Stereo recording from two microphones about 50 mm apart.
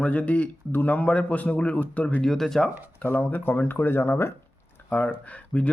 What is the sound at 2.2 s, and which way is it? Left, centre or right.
Speech, centre.